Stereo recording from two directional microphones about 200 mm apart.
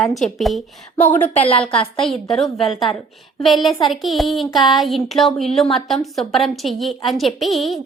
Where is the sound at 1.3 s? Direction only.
30° left (ahead or behind).